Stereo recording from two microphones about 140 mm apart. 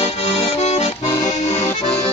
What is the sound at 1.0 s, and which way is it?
Accordion, 25° left (ahead or behind).